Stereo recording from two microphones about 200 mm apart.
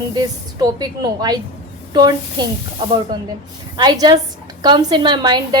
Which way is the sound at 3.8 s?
20° right (ahead or behind).